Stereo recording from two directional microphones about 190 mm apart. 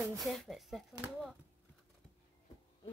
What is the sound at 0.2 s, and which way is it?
Speech, centre (ahead or behind).